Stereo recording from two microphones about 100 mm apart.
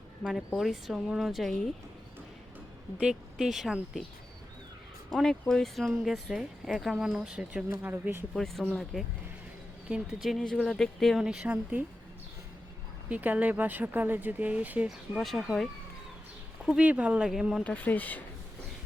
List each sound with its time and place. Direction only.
0.2 s speech: centre (ahead or behind)
3.0 s speech: 5° right (ahead or behind)
5.1 s speech: 5° left (ahead or behind); by 8.2 s 20° right (ahead or behind)
8.3 s speech: 5° left (ahead or behind)
11.2 s speech: 5° right (ahead or behind)
13.1 s speech: 15° right (ahead or behind)
14.8 s speech: centre (ahead or behind)
16.6 s speech: 10° right (ahead or behind)
17.6 s speech: 15° left (ahead or behind)